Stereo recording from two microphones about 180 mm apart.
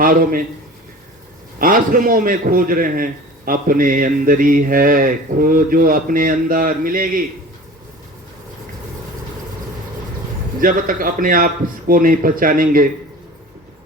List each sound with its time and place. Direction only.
0.0 s a man's voice: 50° right (ahead or behind)
1.5 s a man's voice: 50° right (ahead or behind)
10.6 s a man's voice: 50° right (ahead or behind)